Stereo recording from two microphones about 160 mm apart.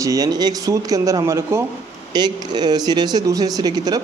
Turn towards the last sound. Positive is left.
turn(degrees=-25)  # may be behind; listen again after turning